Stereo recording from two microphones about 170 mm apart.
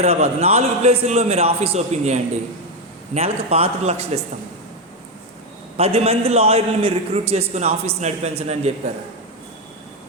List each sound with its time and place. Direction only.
0.0 s a man's voice: 40° right (ahead or behind)
5.7 s a man's voice: 35° right (ahead or behind)